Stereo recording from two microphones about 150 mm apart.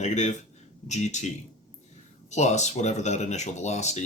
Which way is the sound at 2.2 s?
50° left (ahead or behind).